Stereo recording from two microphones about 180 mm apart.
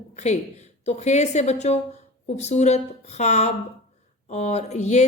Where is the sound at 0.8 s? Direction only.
40° left (ahead or behind).